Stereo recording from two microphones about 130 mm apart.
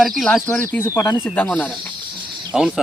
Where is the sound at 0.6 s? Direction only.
20° left (ahead or behind).